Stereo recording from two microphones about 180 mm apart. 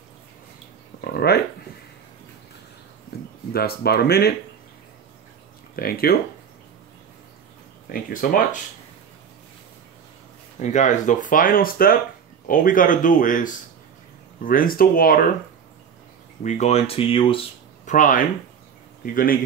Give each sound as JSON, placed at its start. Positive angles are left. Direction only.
{"t": 1.0, "sound": "dog", "side_deg": 60}
{"t": 3.1, "sound": "a sound", "side_deg": 60}
{"t": 3.5, "sound": "speech", "side_deg": 60}
{"t": 5.8, "sound": "speech", "side_deg": 55}
{"t": 7.9, "sound": "speech", "side_deg": 50}
{"t": 10.6, "sound": "speech", "side_deg": 40}
{"t": 16.4, "sound": "speech", "side_deg": 40}
{"t": 17.8, "sound": "speech", "side_deg": 45}